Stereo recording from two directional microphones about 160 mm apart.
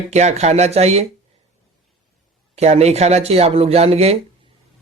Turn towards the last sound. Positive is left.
turn(degrees=-40)  # may be behind; listen again after turning